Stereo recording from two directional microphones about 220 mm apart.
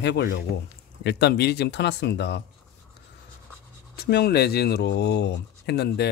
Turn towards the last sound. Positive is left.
turn(degrees=50)  # may be behind; listen again after turning